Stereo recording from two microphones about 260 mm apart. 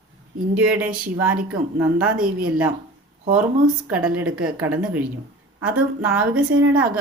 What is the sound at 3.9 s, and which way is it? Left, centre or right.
Speech, centre.